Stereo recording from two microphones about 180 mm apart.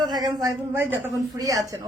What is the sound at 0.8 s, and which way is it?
Speech, 10° right (ahead or behind).